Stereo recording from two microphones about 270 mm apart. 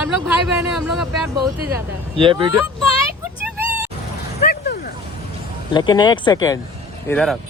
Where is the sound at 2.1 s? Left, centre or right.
Centre.